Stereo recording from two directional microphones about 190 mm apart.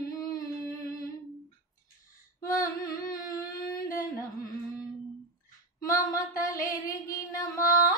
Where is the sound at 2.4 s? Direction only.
15° left (ahead or behind).